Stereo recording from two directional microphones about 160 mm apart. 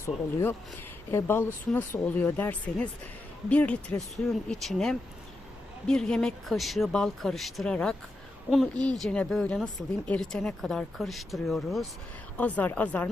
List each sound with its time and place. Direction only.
0.0 s speech: 20° left (ahead or behind)